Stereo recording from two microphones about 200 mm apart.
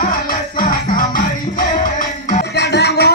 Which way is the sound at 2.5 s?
55° left (ahead or behind).